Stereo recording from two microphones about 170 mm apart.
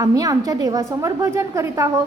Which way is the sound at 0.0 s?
20° right (ahead or behind).